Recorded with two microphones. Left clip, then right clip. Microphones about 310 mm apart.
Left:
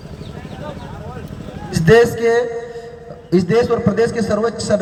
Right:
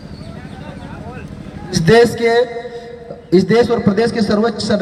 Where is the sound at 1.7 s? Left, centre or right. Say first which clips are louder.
Right 1 dB; centre.